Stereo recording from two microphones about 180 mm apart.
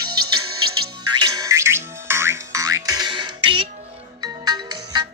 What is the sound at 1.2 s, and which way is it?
Music, 20° right (ahead or behind).